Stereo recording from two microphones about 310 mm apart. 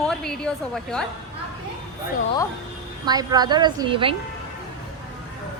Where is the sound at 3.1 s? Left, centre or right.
Centre.